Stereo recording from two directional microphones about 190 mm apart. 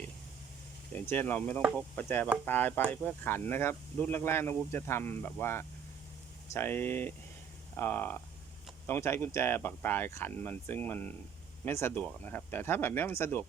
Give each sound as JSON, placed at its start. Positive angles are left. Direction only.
{"t": 0.9, "sound": "speech", "side_deg": 10}